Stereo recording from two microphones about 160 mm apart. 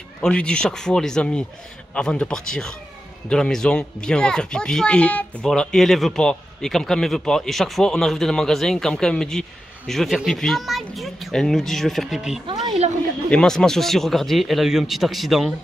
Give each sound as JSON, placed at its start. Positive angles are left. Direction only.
{"t": 0.2, "sound": "speech", "side_deg": 5}